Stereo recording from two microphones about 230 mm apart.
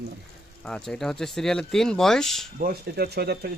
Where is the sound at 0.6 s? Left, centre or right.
Centre.